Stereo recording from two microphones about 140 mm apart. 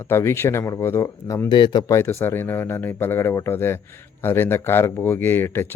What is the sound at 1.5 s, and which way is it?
Speech, 35° left (ahead or behind).